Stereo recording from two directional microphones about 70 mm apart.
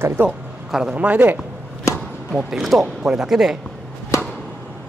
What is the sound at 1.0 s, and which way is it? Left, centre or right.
Speech, right.